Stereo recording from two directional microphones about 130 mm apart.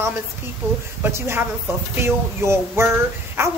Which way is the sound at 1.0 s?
20° right (ahead or behind).